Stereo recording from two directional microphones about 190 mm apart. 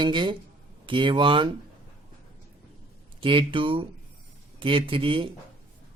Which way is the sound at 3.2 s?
25° right (ahead or behind).